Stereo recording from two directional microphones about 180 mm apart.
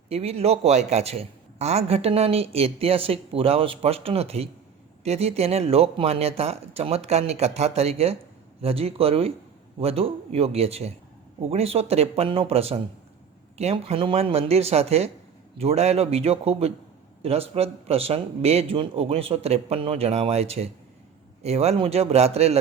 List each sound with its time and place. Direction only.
0.1 s a man's voice: 35° right (ahead or behind)